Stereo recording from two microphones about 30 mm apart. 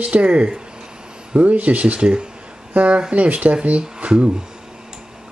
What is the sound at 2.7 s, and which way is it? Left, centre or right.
Speech, right.